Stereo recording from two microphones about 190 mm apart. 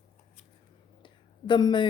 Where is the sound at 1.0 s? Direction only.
25° left (ahead or behind).